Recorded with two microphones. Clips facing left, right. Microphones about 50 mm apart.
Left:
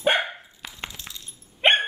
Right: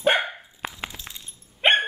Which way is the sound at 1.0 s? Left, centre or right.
Centre.